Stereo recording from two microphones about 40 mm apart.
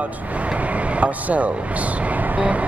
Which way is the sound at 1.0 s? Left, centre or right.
Right.